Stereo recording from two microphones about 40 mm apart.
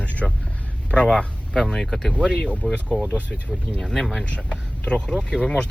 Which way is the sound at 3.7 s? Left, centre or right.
Centre.